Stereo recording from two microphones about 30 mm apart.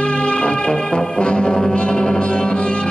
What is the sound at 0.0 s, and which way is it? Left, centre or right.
Music, left.